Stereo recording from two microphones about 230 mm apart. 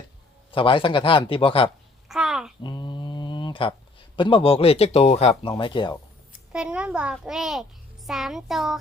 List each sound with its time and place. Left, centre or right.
0.5 s speech: left
2.0 s babbling: centre
2.6 s mantra: centre
4.2 s speech: left
6.5 s a child's voice: centre